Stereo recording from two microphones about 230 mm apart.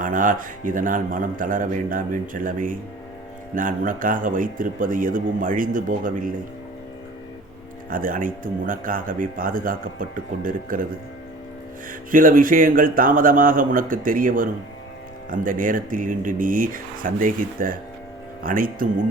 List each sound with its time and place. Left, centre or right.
0.0 s speech: right
7.9 s speech: right
12.1 s speech: right